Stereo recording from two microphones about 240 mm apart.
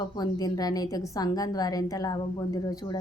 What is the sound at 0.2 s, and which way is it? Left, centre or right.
A woman's voice, centre.